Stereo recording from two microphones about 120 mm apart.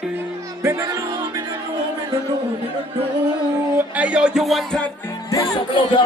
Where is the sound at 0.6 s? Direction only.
25° right (ahead or behind).